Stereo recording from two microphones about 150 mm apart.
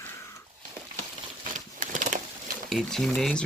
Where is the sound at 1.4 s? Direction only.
60° right (ahead or behind).